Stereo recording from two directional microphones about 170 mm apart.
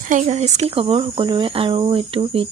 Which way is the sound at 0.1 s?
40° right (ahead or behind).